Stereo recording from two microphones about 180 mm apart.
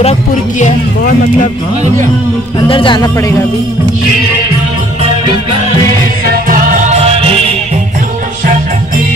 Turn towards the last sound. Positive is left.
turn(degrees=-35)  # may be behind; listen again after turning